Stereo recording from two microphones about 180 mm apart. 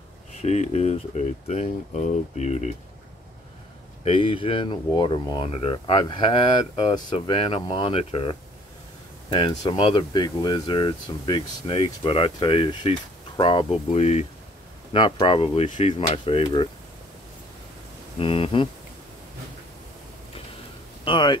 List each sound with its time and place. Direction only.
0.4 s speech: 35° left (ahead or behind)
4.0 s speech: 30° left (ahead or behind)
18.2 s speech: 30° left (ahead or behind)
21.0 s speech: 25° left (ahead or behind)